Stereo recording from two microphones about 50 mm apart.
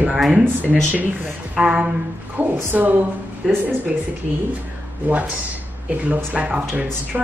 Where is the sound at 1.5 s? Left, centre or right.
Right.